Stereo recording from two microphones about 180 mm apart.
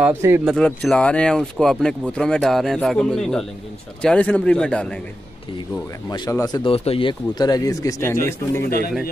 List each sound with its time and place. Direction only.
0.0 s speech: 10° right (ahead or behind)
0.6 s speech: 5° left (ahead or behind)
6.0 s speech: 20° left (ahead or behind)
8.6 s speech: 60° left (ahead or behind)